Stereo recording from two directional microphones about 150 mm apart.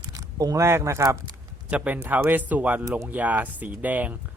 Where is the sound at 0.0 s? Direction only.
25° right (ahead or behind).